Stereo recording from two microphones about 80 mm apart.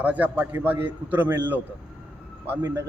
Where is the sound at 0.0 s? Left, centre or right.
Right.